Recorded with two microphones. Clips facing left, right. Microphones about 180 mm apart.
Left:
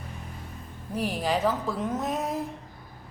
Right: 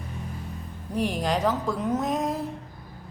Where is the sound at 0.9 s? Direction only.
5° left (ahead or behind).